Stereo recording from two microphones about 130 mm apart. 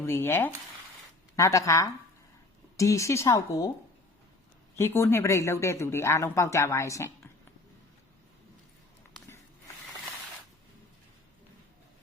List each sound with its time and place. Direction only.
0.0 s speech: 20° left (ahead or behind)
4.8 s speech: 20° left (ahead or behind)